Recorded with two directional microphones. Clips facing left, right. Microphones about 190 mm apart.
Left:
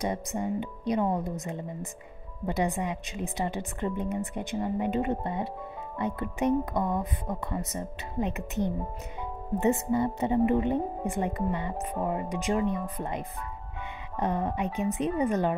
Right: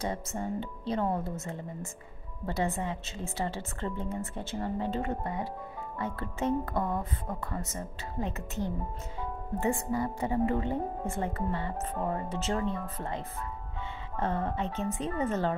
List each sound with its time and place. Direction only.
0.0 s a woman's voice: 15° left (ahead or behind)